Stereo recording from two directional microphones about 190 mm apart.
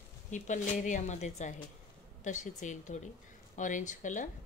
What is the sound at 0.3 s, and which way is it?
Speech, 40° left (ahead or behind).